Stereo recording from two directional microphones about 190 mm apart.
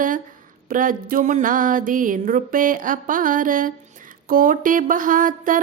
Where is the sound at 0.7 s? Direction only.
45° right (ahead or behind).